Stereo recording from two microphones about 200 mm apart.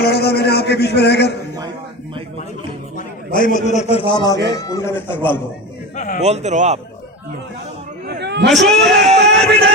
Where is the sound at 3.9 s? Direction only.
25° left (ahead or behind); by 5.4 s 10° left (ahead or behind).